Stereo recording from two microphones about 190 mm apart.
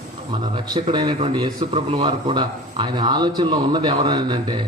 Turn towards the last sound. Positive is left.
turn(degrees=-25)  # may be behind; listen again after turning